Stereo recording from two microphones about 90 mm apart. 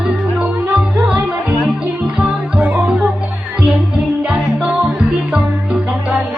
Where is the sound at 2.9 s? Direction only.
10° right (ahead or behind).